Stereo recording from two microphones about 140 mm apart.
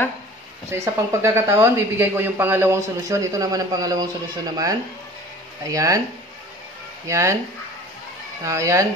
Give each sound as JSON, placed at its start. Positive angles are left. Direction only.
{"t": 0.7, "sound": "speech", "side_deg": -20}
{"t": 7.1, "sound": "speech", "side_deg": -20}
{"t": 8.5, "sound": "speech", "side_deg": -20}